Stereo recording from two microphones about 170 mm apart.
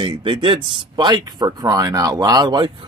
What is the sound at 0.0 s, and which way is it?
Speech, 30° right (ahead or behind).